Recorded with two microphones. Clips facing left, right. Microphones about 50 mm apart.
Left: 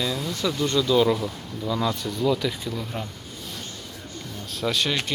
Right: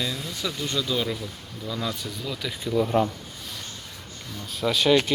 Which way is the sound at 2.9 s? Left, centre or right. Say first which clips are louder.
Right 11 dB; right.